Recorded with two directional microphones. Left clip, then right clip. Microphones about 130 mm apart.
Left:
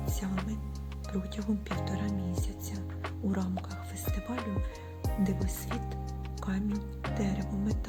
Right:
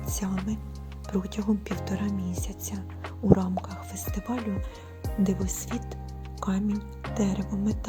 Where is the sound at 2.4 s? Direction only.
40° right (ahead or behind).